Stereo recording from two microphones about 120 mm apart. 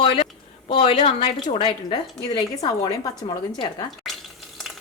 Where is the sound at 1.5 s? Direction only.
40° left (ahead or behind).